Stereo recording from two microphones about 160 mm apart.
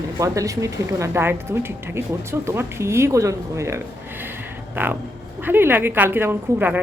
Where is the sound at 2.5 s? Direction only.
15° right (ahead or behind).